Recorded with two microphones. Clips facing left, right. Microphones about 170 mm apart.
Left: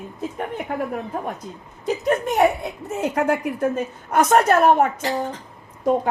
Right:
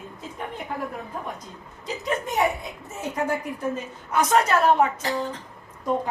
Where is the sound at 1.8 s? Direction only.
60° left (ahead or behind).